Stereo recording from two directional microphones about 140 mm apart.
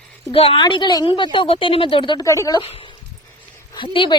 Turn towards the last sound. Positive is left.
turn(degrees=35)  # may be behind; listen again after turning